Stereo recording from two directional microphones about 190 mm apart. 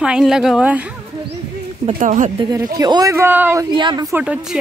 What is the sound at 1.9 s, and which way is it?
Speech, 40° right (ahead or behind).